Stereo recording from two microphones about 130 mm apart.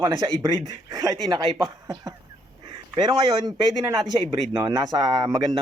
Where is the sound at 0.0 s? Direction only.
35° right (ahead or behind).